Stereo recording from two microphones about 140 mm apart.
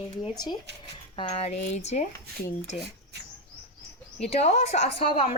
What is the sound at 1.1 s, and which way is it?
Speech, 45° left (ahead or behind).